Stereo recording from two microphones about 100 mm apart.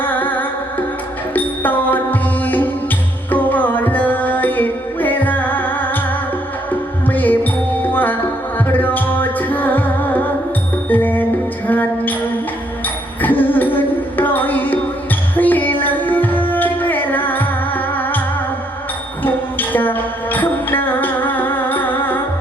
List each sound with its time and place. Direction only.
0.0 s music: 20° left (ahead or behind)
7.1 s music: 20° left (ahead or behind)
13.2 s music: 20° left (ahead or behind)
19.2 s music: 20° left (ahead or behind)